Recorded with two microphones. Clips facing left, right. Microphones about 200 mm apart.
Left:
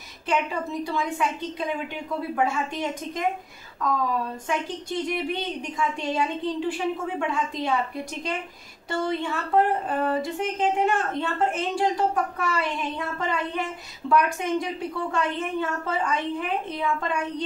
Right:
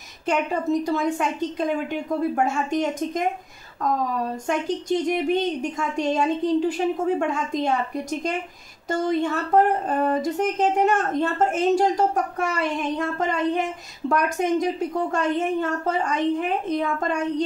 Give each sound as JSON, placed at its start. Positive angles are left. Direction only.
{"t": 0.3, "sound": "speech", "side_deg": -45}
{"t": 4.5, "sound": "speech", "side_deg": -45}